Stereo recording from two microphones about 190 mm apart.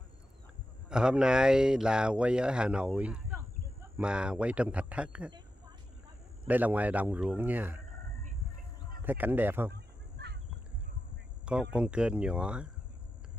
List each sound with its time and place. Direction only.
0.8 s a man's voice: 5° right (ahead or behind)
6.4 s a man's voice: 10° right (ahead or behind)
9.0 s a man's voice: 10° right (ahead or behind)
9.7 s fowl: 60° right (ahead or behind)
11.7 s speech: 5° right (ahead or behind)